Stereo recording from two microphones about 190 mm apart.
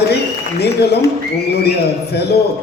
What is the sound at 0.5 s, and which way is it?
Speech, 60° left (ahead or behind).